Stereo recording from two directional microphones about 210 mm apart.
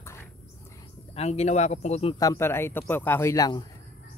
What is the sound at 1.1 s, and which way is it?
Speech, 30° left (ahead or behind).